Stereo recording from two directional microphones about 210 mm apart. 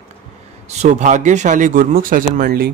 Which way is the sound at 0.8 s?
35° right (ahead or behind).